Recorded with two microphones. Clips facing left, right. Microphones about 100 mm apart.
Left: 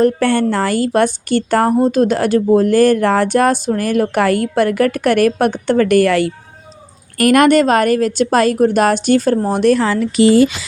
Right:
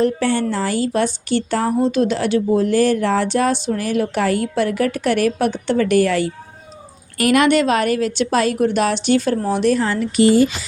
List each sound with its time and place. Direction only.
0.0 s a woman's voice: 60° left (ahead or behind)
7.2 s a woman's voice: 50° left (ahead or behind)
9.5 s speech: 55° left (ahead or behind); by 10.6 s 90° left